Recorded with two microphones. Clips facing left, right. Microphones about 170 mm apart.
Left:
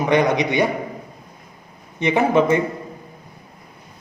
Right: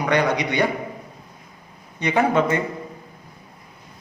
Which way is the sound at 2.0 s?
20° left (ahead or behind).